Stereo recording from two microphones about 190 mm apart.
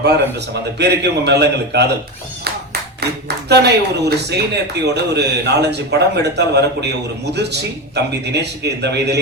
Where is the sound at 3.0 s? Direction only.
60° right (ahead or behind).